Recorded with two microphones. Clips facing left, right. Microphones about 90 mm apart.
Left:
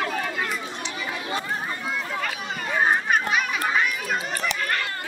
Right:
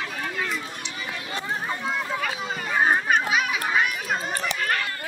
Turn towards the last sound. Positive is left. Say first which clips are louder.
# even
turn(degrees=-5)  # may be behind; listen again after turning